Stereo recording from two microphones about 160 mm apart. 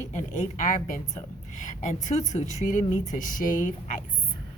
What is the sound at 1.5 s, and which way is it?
Speech, 50° left (ahead or behind).